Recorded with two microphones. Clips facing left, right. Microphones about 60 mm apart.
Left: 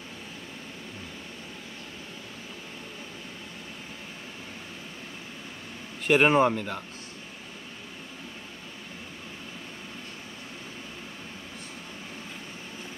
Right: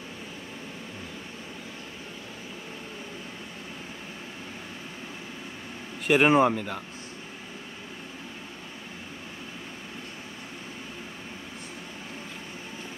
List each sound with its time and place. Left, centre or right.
6.0 s speech: centre